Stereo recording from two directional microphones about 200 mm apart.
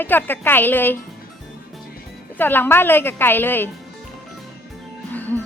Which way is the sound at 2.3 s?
10° left (ahead or behind).